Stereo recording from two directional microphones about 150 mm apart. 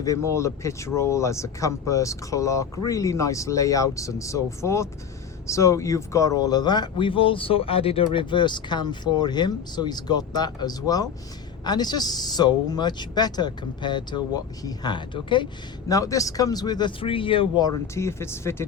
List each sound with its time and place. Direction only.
0.0 s speech: 20° left (ahead or behind)
15.9 s speech: 20° left (ahead or behind)
17.9 s speech: 15° left (ahead or behind)